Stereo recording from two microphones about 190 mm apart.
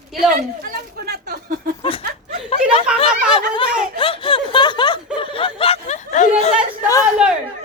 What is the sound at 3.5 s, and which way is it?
Snicker, 25° left (ahead or behind).